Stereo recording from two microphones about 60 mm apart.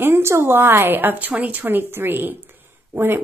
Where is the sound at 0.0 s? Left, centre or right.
Right.